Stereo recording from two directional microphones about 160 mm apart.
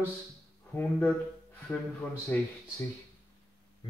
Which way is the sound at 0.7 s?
10° left (ahead or behind).